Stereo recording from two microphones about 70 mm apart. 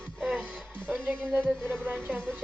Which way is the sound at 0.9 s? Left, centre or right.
Right.